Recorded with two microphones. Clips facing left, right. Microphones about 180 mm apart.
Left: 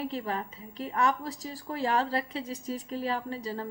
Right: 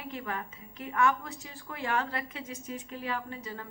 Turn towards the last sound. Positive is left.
turn(degrees=35)  # may be behind; listen again after turning